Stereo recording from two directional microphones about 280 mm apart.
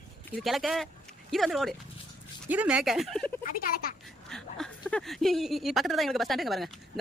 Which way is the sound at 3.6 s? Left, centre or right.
Left.